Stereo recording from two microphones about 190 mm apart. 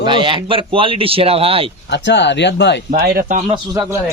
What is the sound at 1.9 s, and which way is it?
Speech, 65° left (ahead or behind).